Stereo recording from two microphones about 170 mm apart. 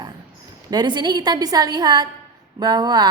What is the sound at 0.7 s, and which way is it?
A woman's voice, 25° right (ahead or behind).